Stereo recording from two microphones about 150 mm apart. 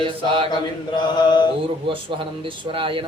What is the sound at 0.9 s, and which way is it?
Mantra, 30° left (ahead or behind).